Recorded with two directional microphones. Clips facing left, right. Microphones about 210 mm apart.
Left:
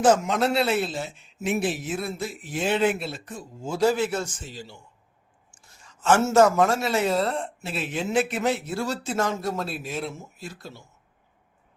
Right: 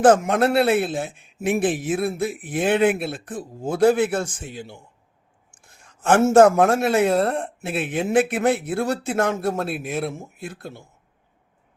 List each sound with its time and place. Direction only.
0.0 s a man's voice: 55° right (ahead or behind)